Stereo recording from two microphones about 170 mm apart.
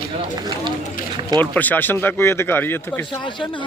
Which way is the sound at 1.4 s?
10° left (ahead or behind).